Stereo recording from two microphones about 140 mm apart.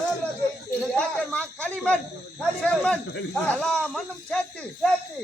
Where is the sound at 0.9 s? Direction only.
10° left (ahead or behind).